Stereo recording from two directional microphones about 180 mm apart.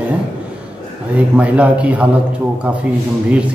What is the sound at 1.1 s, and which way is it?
Speech, 10° right (ahead or behind).